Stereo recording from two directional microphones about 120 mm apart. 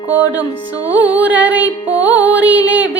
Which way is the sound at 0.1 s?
15° right (ahead or behind).